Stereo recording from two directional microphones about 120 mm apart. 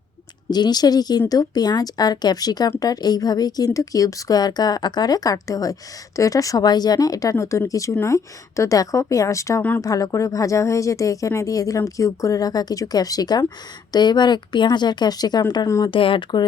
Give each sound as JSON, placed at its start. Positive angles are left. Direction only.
{"t": 0.5, "sound": "a woman's voice", "side_deg": 35}
{"t": 15.9, "sound": "speech", "side_deg": 45}